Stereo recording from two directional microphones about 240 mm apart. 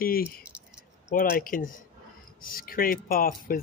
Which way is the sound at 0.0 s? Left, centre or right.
Left.